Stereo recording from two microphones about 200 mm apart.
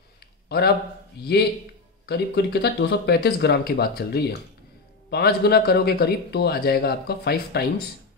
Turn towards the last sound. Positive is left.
turn(degrees=55)  # may be behind; listen again after turning